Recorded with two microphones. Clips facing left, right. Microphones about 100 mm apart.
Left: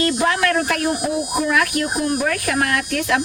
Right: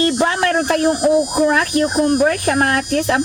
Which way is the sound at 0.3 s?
30° right (ahead or behind).